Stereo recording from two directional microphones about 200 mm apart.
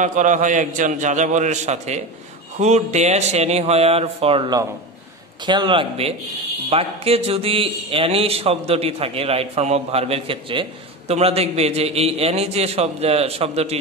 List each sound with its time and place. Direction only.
0.0 s a man's voice: 40° right (ahead or behind)